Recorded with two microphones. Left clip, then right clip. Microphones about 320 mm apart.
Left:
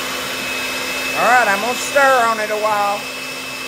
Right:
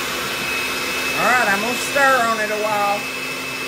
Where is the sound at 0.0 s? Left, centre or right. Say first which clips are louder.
Even; centre.